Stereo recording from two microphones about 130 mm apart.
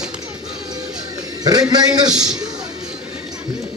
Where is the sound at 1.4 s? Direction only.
30° right (ahead or behind).